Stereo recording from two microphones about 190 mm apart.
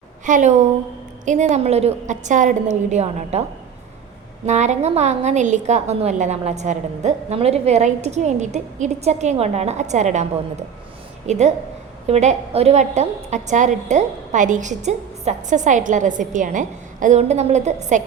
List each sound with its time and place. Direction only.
0.3 s a woman's voice: 40° right (ahead or behind)
4.4 s a woman's voice: 40° right (ahead or behind)
11.3 s a woman's voice: 35° right (ahead or behind)